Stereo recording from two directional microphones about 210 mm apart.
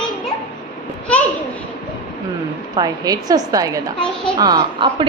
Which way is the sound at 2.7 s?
20° right (ahead or behind).